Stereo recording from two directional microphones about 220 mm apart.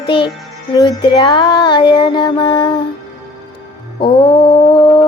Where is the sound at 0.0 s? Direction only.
25° left (ahead or behind).